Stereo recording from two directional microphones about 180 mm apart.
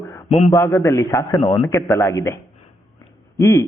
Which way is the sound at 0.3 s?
35° left (ahead or behind).